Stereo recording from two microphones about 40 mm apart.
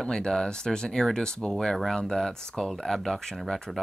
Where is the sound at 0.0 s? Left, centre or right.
Centre.